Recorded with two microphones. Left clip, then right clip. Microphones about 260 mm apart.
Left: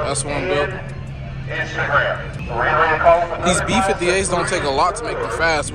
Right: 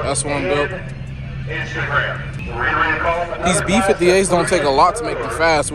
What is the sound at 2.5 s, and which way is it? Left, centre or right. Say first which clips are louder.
Speech: left 1 dB; left.